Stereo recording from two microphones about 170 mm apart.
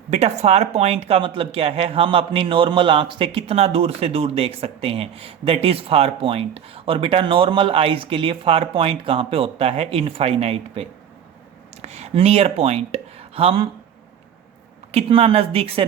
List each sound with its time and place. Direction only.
0.1 s speech: 40° right (ahead or behind)
14.9 s speech: 35° right (ahead or behind)